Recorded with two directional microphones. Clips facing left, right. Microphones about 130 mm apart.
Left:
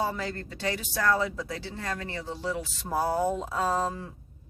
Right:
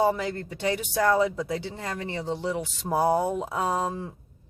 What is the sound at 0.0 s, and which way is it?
Speech, 20° right (ahead or behind).